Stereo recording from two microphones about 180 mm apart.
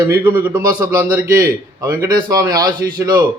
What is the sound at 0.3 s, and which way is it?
A man's voice, 10° right (ahead or behind).